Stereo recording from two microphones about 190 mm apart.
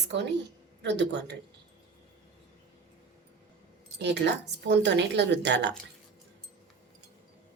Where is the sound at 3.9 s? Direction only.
65° right (ahead or behind).